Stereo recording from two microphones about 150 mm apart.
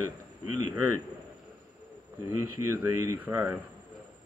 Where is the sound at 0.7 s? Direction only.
15° right (ahead or behind).